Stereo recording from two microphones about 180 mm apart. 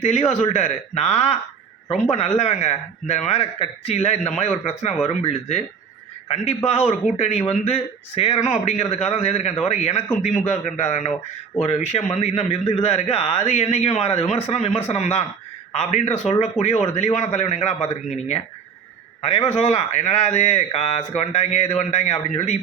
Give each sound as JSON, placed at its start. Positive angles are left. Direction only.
{"t": 0.0, "sound": "a man's voice", "side_deg": 35}
{"t": 6.7, "sound": "a man's voice", "side_deg": 35}